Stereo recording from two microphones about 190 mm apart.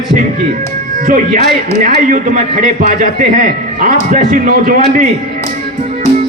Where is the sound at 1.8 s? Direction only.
45° right (ahead or behind).